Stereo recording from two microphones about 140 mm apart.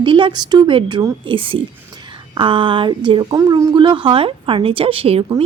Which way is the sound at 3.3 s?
25° right (ahead or behind).